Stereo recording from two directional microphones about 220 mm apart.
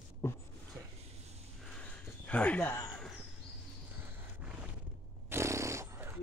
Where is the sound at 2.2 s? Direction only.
5° left (ahead or behind).